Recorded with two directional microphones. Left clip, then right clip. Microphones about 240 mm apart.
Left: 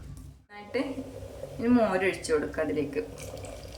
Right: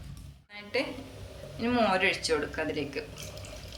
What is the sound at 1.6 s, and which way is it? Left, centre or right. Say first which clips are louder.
A woman's voice: left 1 dB; centre.